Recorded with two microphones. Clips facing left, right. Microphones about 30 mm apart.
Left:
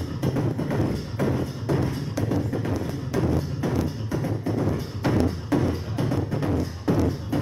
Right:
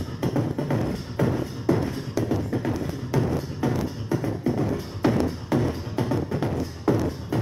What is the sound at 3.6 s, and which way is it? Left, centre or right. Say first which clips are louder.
Music: right 4 dB; centre.